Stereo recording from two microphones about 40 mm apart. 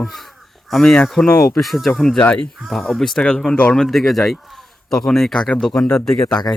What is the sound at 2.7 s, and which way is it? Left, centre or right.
Speech, centre.